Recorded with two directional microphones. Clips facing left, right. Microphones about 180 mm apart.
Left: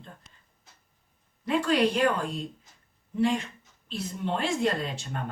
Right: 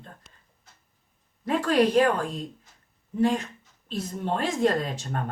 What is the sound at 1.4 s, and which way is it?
A woman's voice, 45° right (ahead or behind).